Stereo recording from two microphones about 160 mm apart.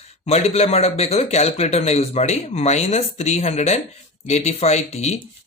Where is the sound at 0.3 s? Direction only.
40° left (ahead or behind).